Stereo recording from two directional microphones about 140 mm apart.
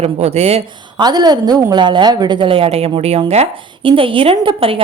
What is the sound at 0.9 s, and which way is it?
A woman's voice, 30° right (ahead or behind).